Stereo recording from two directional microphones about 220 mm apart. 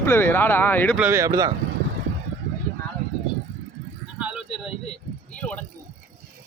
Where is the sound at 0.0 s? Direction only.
10° left (ahead or behind).